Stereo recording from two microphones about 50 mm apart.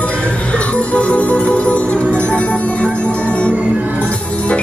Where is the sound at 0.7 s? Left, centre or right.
Left.